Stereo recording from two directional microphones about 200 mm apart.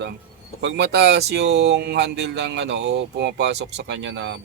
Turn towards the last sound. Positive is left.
turn(degrees=-60)  # may be behind; listen again after turning